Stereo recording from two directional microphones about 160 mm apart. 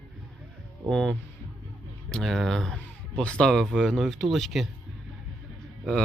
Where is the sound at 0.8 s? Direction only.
5° left (ahead or behind).